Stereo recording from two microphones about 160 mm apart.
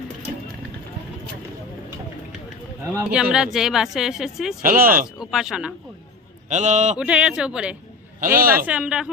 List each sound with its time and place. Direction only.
3.1 s speech: 5° right (ahead or behind)
4.6 s speech: 60° right (ahead or behind)
5.2 s speech: centre (ahead or behind)
6.5 s a man's voice: 50° right (ahead or behind)
7.0 s speech: 5° right (ahead or behind)
8.4 s speech: 65° right (ahead or behind)
8.6 s speech: 5° right (ahead or behind)